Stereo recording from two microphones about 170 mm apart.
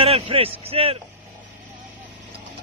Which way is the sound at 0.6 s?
35° right (ahead or behind).